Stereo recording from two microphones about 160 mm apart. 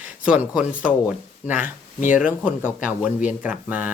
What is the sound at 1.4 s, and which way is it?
Speech, 10° right (ahead or behind).